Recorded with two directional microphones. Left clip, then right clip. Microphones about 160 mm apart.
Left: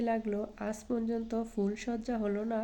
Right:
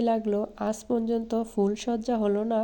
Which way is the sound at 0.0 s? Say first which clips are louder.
Right 7 dB; 35° right (ahead or behind).